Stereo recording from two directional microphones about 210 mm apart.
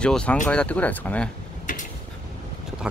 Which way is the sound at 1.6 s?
40° left (ahead or behind).